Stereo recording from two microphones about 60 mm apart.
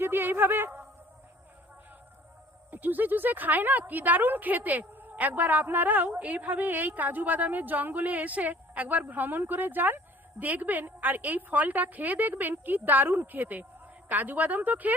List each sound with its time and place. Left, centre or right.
0.0 s speech: right
2.6 s a woman's voice: right